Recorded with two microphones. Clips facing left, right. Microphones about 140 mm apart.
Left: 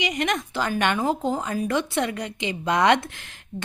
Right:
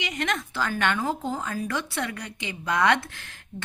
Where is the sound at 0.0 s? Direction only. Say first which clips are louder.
Left 4 dB; 15° left (ahead or behind).